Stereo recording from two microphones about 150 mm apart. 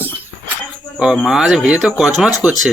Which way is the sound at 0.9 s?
Centre (ahead or behind).